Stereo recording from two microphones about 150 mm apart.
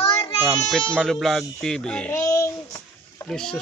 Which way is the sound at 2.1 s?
20° left (ahead or behind).